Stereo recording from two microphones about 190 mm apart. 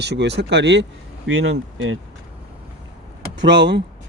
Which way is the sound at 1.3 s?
90° right.